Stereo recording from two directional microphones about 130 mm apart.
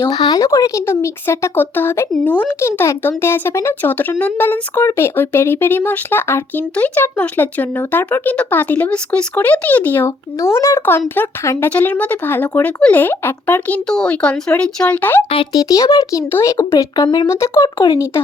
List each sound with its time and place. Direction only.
0.1 s speech: 35° left (ahead or behind); by 15.2 s 10° left (ahead or behind)
15.5 s speech: 25° left (ahead or behind)
17.2 s speech: 20° left (ahead or behind)